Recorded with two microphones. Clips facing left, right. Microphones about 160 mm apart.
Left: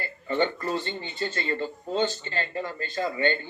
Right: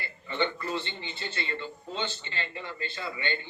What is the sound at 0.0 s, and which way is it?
A man's voice, 45° left (ahead or behind).